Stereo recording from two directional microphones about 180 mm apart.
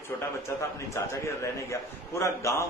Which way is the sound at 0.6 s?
15° left (ahead or behind).